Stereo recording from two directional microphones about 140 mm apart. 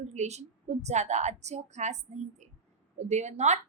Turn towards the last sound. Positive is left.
turn(degrees=-55)  # may be behind; listen again after turning